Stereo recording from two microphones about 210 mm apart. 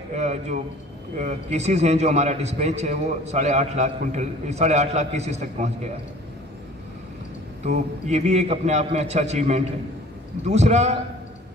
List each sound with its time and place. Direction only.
0.1 s a sound: 30° right (ahead or behind)
1.1 s a man's voice: 35° right (ahead or behind)
7.6 s a man's voice: 35° right (ahead or behind)